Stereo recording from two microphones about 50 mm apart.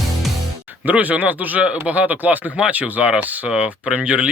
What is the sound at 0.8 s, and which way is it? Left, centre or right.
Speech, right.